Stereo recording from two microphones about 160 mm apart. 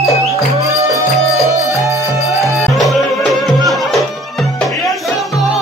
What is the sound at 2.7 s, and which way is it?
Music, centre (ahead or behind).